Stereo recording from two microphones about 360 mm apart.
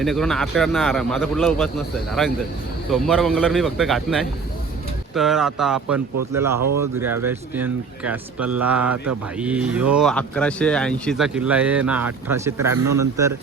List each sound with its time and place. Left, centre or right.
0.0 s speech: centre
2.9 s a man's voice: centre